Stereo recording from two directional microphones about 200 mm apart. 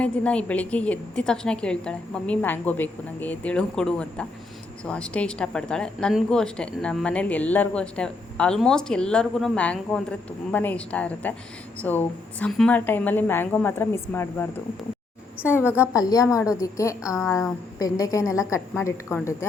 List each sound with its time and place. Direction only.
0.0 s a woman's voice: 5° left (ahead or behind)
15.4 s a woman's voice: 10° left (ahead or behind)